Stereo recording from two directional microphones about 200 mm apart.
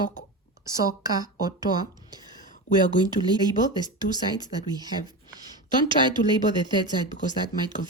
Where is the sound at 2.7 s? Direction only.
35° left (ahead or behind).